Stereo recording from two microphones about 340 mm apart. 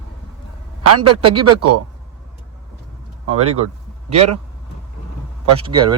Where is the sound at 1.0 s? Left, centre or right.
Right.